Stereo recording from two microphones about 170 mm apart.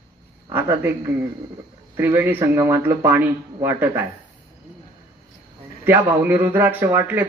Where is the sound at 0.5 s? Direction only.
10° right (ahead or behind).